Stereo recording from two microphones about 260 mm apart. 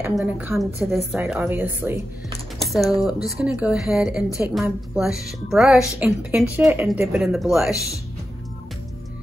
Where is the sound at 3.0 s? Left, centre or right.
Centre.